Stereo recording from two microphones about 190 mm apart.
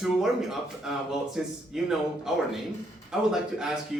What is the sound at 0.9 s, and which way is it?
A man's voice, centre (ahead or behind).